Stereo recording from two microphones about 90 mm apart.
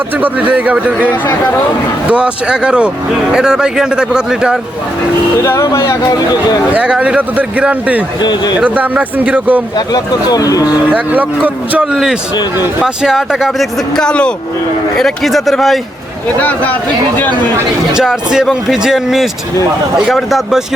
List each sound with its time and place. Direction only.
0.5 s a man's voice: 15° right (ahead or behind)
2.0 s a man's voice: 15° right (ahead or behind)
5.4 s speech: 40° left (ahead or behind)
6.7 s a man's voice: 10° right (ahead or behind)
8.2 s speech: 50° left (ahead or behind)
8.5 s a man's voice: 15° right (ahead or behind)
9.7 s speech: 50° left (ahead or behind)
10.9 s a man's voice: 20° right (ahead or behind); by 15.8 s centre (ahead or behind)
16.4 s speech: 20° left (ahead or behind)
17.9 s a man's voice: 5° right (ahead or behind)